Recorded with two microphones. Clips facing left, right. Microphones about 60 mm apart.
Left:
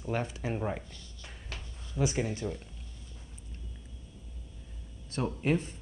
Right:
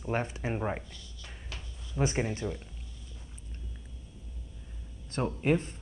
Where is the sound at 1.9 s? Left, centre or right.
Right.